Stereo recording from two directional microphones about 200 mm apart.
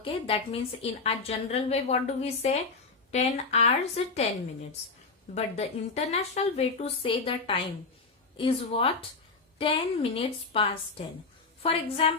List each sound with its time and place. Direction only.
0.0 s a woman's voice: 30° left (ahead or behind)
5.3 s a woman's voice: 35° left (ahead or behind)